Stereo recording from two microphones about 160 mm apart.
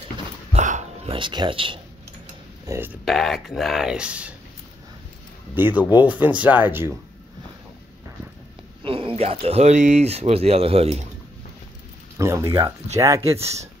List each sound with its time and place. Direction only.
0.5 s dog: 50° right (ahead or behind)
1.1 s speech: 30° right (ahead or behind)
2.6 s speech: 15° right (ahead or behind)
3.1 s speech: centre (ahead or behind)
5.5 s speech: 10° right (ahead or behind)
8.8 s speech: 35° right (ahead or behind)
12.2 s speech: 20° right (ahead or behind)